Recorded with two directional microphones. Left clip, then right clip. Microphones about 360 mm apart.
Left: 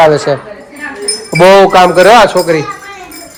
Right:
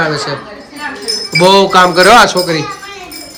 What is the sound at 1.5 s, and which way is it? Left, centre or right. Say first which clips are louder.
Speech: left 3 dB; centre.